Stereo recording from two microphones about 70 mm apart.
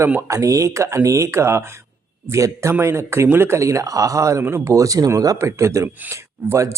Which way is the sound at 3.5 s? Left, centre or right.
Right.